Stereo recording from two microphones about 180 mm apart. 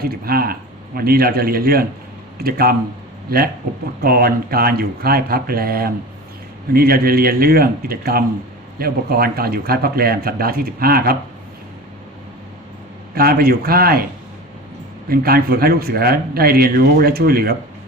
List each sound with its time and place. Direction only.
0.0 s speech: 55° right (ahead or behind)
13.1 s speech: 55° right (ahead or behind)
15.1 s speech: 55° right (ahead or behind)